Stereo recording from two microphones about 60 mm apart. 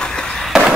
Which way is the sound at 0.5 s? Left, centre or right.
Centre.